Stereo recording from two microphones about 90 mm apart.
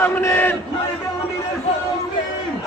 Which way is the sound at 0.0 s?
25° left (ahead or behind).